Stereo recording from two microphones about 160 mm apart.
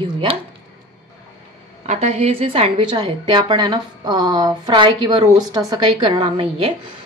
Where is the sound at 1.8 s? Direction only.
40° right (ahead or behind).